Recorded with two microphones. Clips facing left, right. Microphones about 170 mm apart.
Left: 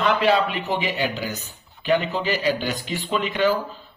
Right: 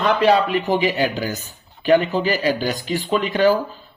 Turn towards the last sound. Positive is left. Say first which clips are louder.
# right 4 dB
turn(degrees=-45)  # may be behind; listen again after turning